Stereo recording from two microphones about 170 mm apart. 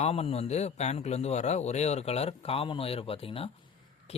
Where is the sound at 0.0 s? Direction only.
35° left (ahead or behind).